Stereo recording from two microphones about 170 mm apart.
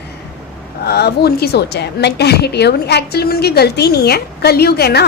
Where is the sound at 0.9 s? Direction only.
70° left (ahead or behind).